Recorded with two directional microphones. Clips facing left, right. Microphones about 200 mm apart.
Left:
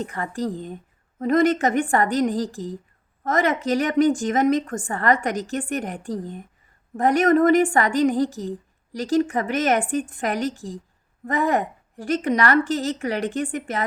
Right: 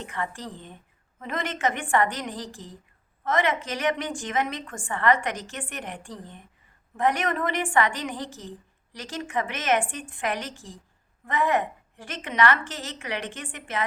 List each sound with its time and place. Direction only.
0.0 s a woman's voice: 40° left (ahead or behind)